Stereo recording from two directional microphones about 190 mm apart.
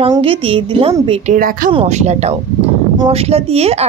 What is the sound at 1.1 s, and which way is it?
Speech, 45° right (ahead or behind).